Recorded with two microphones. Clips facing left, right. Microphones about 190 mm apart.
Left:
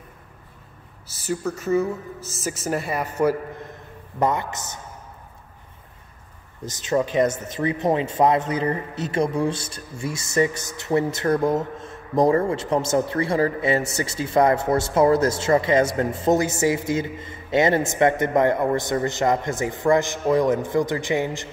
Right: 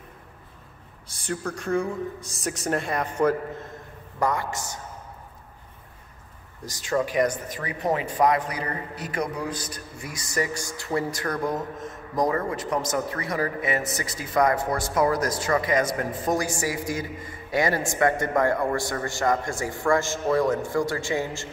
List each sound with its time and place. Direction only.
1.0 s a woman's voice: 5° left (ahead or behind)
4.2 s speech: 20° left (ahead or behind)
6.6 s speech: 20° left (ahead or behind)